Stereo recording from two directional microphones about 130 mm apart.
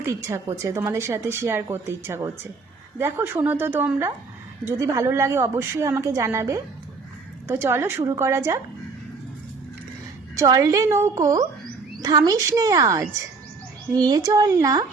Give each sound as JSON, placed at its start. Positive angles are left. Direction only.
{"t": 0.0, "sound": "a woman's voice", "side_deg": -20}
{"t": 10.3, "sound": "a woman's voice", "side_deg": -25}